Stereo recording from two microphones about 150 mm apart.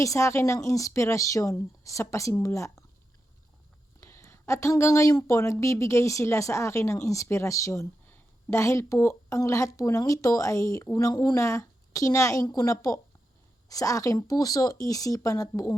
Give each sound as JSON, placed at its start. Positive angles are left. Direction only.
{"t": 0.0, "sound": "speech", "side_deg": 20}
{"t": 4.0, "sound": "speech", "side_deg": 20}